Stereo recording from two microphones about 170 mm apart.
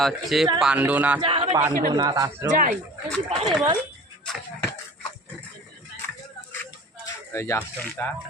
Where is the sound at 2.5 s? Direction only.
55° right (ahead or behind).